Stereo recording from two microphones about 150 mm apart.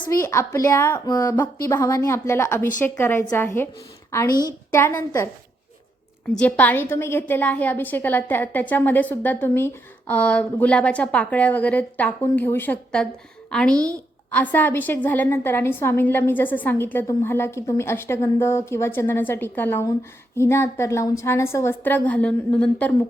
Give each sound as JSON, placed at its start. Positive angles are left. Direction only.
{"t": 0.1, "sound": "a woman's voice", "side_deg": 20}
{"t": 6.3, "sound": "a woman's voice", "side_deg": 10}